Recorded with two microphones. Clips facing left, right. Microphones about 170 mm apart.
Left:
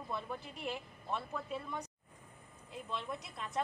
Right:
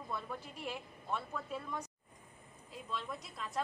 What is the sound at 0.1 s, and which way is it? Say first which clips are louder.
A woman's voice: left 1 dB; centre (ahead or behind).